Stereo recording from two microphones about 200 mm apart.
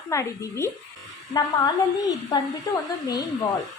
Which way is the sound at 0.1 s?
15° left (ahead or behind).